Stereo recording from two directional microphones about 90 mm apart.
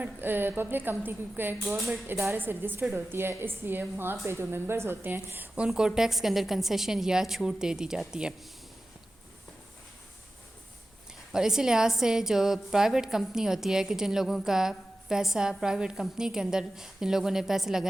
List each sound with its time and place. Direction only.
0.0 s a woman's voice: 20° right (ahead or behind)
1.6 s a woman's voice: centre (ahead or behind)
2.0 s a woman's voice: 30° right (ahead or behind)
5.5 s a woman's voice: 10° right (ahead or behind)
11.3 s a woman's voice: 5° right (ahead or behind)